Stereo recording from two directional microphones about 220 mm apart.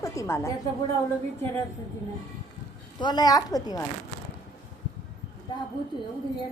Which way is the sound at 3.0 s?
20° left (ahead or behind).